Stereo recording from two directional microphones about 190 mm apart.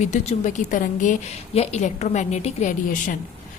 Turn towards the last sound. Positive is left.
turn(degrees=40)  # may be behind; listen again after turning